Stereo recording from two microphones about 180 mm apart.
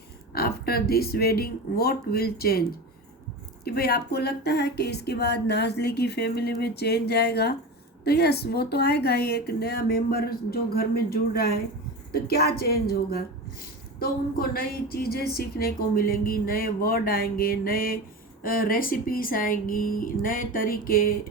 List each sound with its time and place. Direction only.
0.3 s a woman's voice: 60° left (ahead or behind)